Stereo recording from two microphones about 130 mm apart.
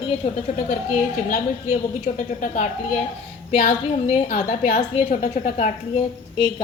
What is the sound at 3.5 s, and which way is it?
A woman's voice, 50° left (ahead or behind).